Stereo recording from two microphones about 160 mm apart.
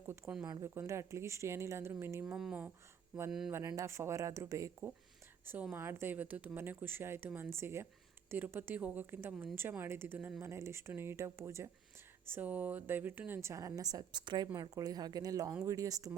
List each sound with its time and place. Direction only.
0.0 s speech: 10° right (ahead or behind)
0.4 s speech: 20° right (ahead or behind)
2.2 s speech: 5° right (ahead or behind)
3.5 s a woman's voice: 20° right (ahead or behind)
5.7 s a woman's voice: 15° right (ahead or behind)